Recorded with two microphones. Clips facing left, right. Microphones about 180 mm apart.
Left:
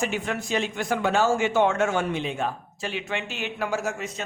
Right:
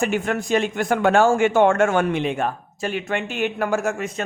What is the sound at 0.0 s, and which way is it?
Speech, 50° right (ahead or behind).